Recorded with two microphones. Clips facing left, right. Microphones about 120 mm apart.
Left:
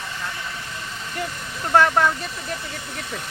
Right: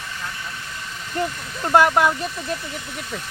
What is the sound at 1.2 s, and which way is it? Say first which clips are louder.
Speech: right 6 dB; 30° right (ahead or behind).